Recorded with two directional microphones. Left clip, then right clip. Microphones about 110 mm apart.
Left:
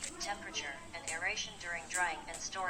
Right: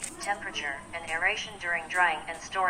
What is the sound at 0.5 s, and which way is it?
A woman's voice, 45° right (ahead or behind).